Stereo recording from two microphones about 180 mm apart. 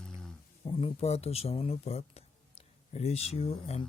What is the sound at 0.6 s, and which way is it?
Speech, 30° left (ahead or behind).